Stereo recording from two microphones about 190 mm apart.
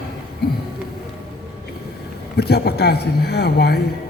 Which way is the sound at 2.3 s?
60° left (ahead or behind).